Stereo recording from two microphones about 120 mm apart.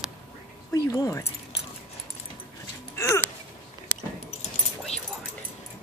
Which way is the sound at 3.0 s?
20° left (ahead or behind).